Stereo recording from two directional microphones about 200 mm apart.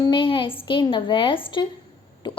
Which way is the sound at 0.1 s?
25° left (ahead or behind).